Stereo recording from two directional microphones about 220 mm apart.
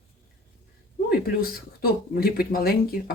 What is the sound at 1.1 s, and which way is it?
Speech, 40° left (ahead or behind).